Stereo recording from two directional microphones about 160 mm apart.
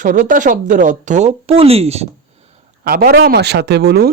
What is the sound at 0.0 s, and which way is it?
Speech, 55° right (ahead or behind).